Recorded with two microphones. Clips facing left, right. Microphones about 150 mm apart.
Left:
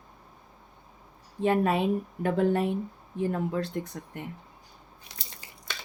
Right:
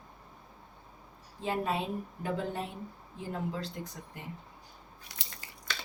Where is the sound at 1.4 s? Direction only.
60° left (ahead or behind).